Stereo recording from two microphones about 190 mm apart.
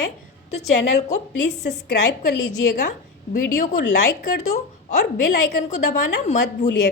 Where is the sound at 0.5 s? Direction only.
35° left (ahead or behind).